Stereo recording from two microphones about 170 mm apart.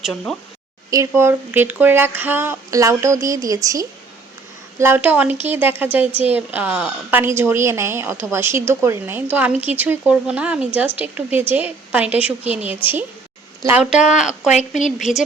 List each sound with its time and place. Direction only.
0.0 s speech: 5° left (ahead or behind)
0.9 s a woman's voice: 15° right (ahead or behind)
14.1 s speech: 5° right (ahead or behind)